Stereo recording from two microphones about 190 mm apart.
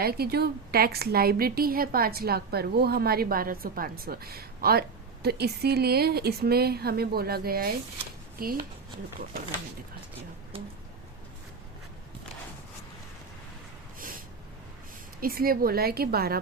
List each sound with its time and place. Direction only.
0.0 s a woman's voice: 55° right (ahead or behind)
15.2 s a woman's voice: 50° right (ahead or behind)